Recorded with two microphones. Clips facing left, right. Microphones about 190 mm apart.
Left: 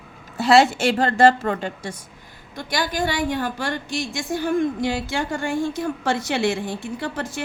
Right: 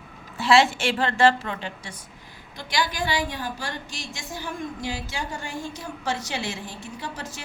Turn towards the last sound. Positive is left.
turn(degrees=55)  # may be behind; listen again after turning